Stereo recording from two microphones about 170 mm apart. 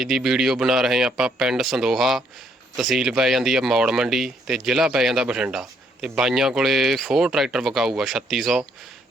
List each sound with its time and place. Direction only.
0.0 s speech: centre (ahead or behind)